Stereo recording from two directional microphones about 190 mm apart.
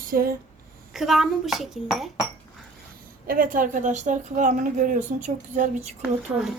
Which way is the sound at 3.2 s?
45° right (ahead or behind).